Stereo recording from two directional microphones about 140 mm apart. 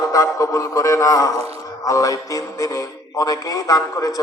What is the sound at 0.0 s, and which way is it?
A man's voice, 25° left (ahead or behind).